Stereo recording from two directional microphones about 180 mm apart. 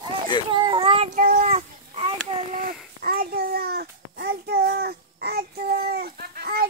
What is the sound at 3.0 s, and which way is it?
Child singing, 55° right (ahead or behind).